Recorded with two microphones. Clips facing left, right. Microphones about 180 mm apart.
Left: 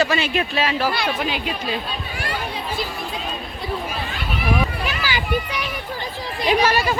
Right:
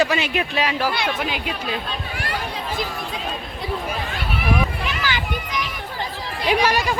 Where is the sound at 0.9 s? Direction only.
5° left (ahead or behind).